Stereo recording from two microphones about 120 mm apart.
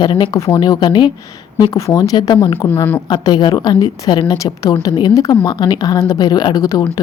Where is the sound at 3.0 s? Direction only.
35° left (ahead or behind).